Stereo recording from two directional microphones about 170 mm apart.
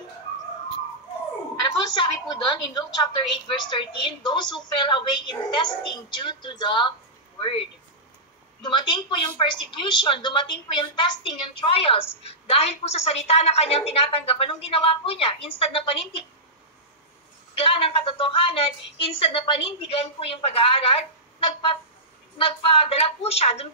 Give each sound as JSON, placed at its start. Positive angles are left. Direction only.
{"t": 2.0, "sound": "a woman's voice", "side_deg": 25}
{"t": 8.6, "sound": "a woman's voice", "side_deg": 30}
{"t": 17.6, "sound": "a woman's voice", "side_deg": 30}